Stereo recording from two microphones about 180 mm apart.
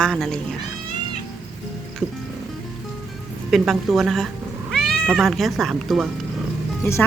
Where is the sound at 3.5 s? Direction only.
Centre (ahead or behind).